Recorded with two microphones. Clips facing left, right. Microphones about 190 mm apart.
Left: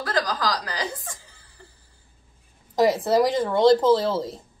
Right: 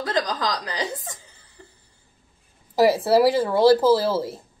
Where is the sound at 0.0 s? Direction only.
20° right (ahead or behind).